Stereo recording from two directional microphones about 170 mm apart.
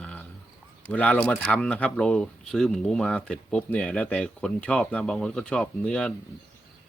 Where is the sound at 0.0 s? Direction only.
10° left (ahead or behind).